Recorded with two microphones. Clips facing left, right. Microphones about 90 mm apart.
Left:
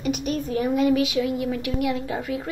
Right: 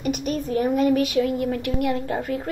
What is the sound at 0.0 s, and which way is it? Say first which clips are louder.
A woman's voice: even; 45° right (ahead or behind).